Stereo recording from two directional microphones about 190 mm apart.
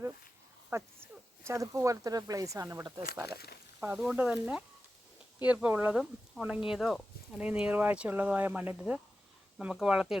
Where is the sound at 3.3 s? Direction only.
55° left (ahead or behind).